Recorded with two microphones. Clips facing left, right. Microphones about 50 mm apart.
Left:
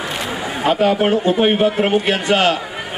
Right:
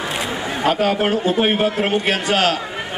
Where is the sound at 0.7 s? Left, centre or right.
Left.